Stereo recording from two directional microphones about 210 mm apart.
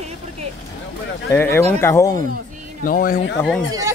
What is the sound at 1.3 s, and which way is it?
Speech, 10° left (ahead or behind).